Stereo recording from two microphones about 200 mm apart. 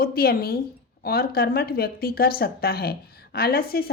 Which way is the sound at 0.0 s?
50° left (ahead or behind).